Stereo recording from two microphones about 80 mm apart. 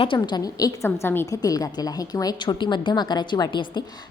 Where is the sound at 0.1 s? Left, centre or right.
Left.